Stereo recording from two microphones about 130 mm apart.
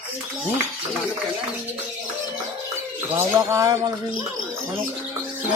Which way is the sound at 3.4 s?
25° right (ahead or behind).